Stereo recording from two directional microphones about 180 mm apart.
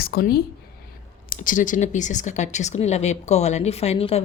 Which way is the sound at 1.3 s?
45° left (ahead or behind).